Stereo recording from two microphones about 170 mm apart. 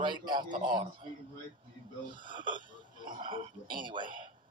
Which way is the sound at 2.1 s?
30° right (ahead or behind).